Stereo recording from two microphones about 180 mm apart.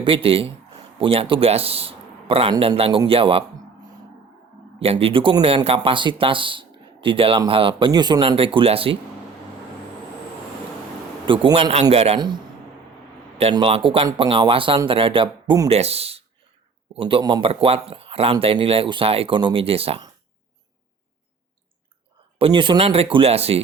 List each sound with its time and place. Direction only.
0.0 s speech: 30° right (ahead or behind)
4.8 s speech: 35° right (ahead or behind)
11.3 s speech: 25° right (ahead or behind)
13.4 s speech: 30° right (ahead or behind)
15.7 s speech: 35° right (ahead or behind)
22.4 s speech: 30° right (ahead or behind)